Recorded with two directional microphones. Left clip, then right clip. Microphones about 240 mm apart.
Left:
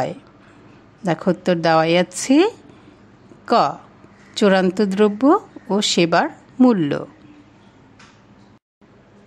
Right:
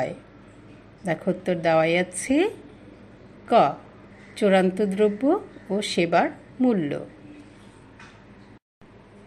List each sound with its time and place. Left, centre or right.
1.0 s speech: left